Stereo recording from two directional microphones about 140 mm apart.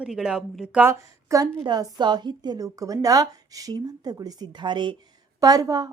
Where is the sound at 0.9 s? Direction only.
20° right (ahead or behind).